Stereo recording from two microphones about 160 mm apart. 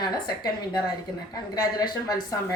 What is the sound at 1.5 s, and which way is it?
Speech, 25° left (ahead or behind).